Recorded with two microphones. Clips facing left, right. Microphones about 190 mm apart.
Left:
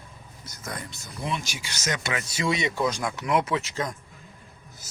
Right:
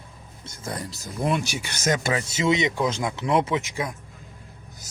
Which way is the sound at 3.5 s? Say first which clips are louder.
Right 1 dB; 15° right (ahead or behind).